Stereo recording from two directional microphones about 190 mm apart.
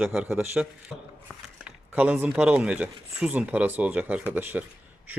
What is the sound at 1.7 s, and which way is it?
Speech, 5° right (ahead or behind).